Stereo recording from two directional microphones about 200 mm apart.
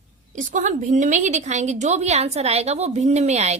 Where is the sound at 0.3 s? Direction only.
40° right (ahead or behind).